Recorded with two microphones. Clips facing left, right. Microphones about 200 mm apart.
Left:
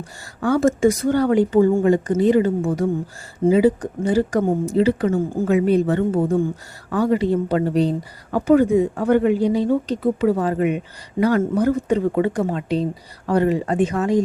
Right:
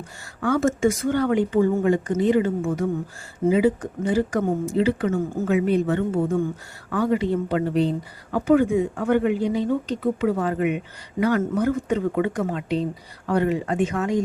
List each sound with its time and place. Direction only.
0.4 s speech: 35° left (ahead or behind)